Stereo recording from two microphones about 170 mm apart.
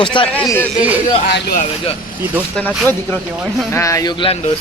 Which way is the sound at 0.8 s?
10° right (ahead or behind).